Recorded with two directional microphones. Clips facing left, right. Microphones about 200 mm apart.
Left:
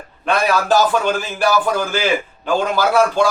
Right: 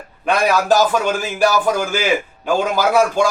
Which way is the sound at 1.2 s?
10° right (ahead or behind).